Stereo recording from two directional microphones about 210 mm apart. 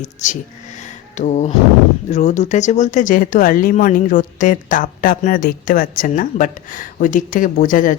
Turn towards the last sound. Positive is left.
turn(degrees=40)  # may be behind; listen again after turning